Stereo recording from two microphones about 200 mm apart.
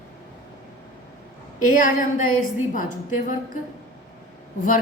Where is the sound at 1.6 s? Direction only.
45° left (ahead or behind).